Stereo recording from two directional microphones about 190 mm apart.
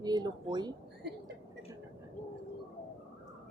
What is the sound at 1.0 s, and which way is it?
Speech, 60° right (ahead or behind).